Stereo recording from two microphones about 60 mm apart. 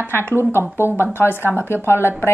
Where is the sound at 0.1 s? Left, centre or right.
Left.